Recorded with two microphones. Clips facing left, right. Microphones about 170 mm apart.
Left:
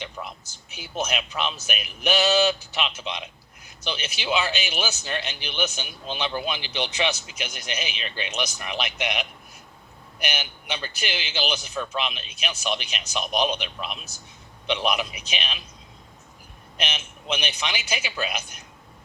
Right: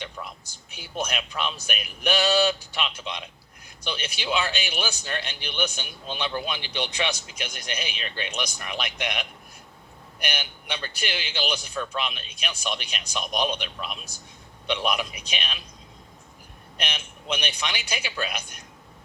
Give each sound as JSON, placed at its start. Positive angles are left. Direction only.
{"t": 0.2, "sound": "a sound", "side_deg": 15}
{"t": 0.8, "sound": "speech", "side_deg": 5}
{"t": 10.2, "sound": "speech", "side_deg": 5}
{"t": 16.9, "sound": "speech", "side_deg": 5}